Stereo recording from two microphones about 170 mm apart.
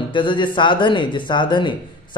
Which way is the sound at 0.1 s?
30° left (ahead or behind).